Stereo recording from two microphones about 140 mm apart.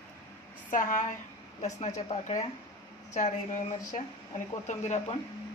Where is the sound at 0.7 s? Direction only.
75° left (ahead or behind).